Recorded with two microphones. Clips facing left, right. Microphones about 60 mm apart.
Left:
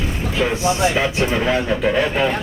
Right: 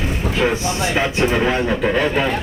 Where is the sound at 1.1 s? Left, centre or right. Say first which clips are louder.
Right 1 dB; centre.